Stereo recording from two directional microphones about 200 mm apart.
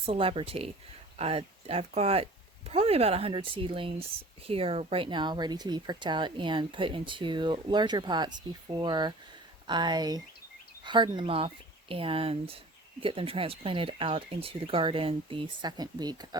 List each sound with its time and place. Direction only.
0.0 s speech: 30° right (ahead or behind)